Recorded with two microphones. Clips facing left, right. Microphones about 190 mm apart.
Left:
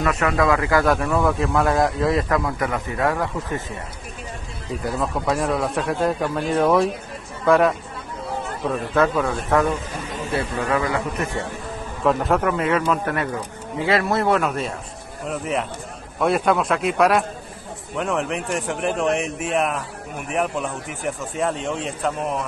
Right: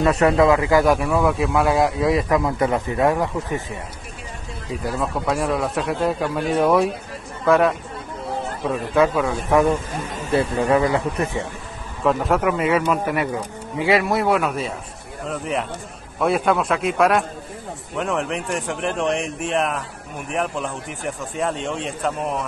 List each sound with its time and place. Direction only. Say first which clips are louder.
0.0 s a man's voice: right 4 dB; 30° right (ahead or behind)
4.8 s a man's voice: even; centre (ahead or behind)
9.7 s a man's voice: right 4 dB; 45° right (ahead or behind)
10.5 s a man's voice: right 4 dB; 30° right (ahead or behind)
12.0 s a man's voice: even; centre (ahead or behind)